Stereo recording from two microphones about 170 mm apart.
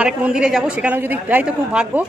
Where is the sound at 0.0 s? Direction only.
5° right (ahead or behind).